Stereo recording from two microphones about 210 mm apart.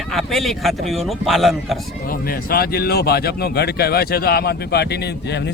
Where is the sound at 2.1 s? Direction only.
45° left (ahead or behind).